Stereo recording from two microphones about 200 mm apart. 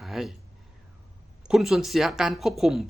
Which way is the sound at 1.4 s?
Centre (ahead or behind).